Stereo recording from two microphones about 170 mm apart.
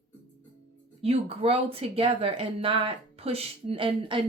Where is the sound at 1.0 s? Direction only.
35° right (ahead or behind).